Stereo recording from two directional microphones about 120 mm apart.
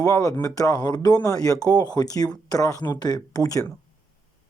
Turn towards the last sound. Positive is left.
turn(degrees=30)  # may be behind; listen again after turning